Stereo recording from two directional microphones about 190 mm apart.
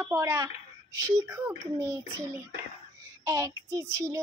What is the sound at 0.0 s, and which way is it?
A woman's voice, 15° right (ahead or behind).